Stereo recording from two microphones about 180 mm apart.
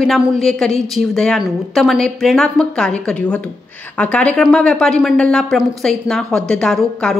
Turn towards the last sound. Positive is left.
turn(degrees=5)  # may be behind; listen again after turning